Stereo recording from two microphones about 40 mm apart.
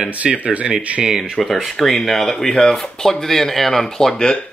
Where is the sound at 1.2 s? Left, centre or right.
Centre.